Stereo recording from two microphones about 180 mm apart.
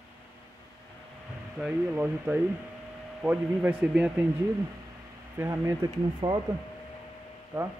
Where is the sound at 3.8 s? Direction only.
5° right (ahead or behind).